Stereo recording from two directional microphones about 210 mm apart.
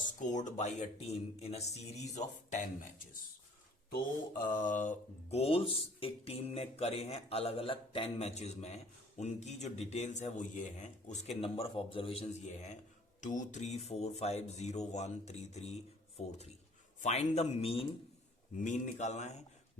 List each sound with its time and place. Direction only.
0.2 s speech: 35° left (ahead or behind)
4.6 s speech: 35° left (ahead or behind)